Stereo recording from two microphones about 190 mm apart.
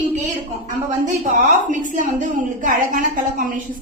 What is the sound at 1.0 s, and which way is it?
A woman's voice, 40° right (ahead or behind).